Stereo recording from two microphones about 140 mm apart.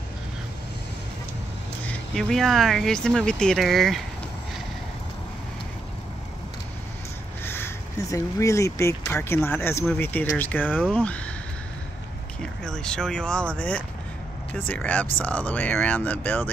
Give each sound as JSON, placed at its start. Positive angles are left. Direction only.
{"t": 1.9, "sound": "speech", "side_deg": 5}
{"t": 7.4, "sound": "speech", "side_deg": 15}
{"t": 12.6, "sound": "speech", "side_deg": 5}